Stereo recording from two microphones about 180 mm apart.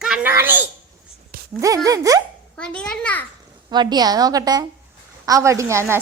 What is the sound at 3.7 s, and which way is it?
A woman's voice, 25° right (ahead or behind).